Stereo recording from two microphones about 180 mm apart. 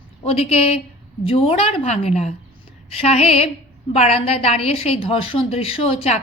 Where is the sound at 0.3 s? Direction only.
35° left (ahead or behind).